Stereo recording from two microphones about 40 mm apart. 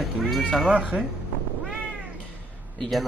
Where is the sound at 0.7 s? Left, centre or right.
Right.